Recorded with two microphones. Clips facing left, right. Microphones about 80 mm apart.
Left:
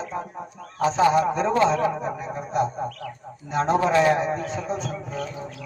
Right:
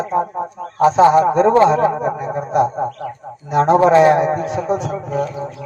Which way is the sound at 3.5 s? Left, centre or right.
Right.